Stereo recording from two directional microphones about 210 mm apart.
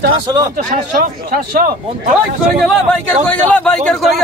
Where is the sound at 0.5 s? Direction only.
40° right (ahead or behind).